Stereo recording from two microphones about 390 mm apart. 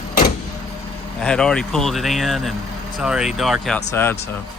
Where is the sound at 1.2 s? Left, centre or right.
Centre.